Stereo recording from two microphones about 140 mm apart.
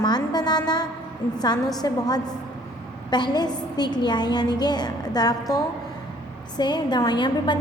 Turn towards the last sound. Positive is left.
turn(degrees=30)  # may be behind; listen again after turning